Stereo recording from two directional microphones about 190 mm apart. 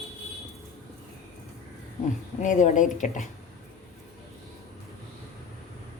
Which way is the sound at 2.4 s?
40° left (ahead or behind).